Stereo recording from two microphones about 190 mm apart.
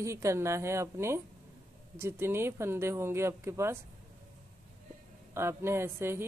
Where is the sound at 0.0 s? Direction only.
15° right (ahead or behind).